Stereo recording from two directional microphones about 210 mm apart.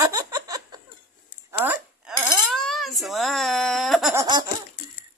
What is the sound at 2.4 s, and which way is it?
Baby cry, centre (ahead or behind).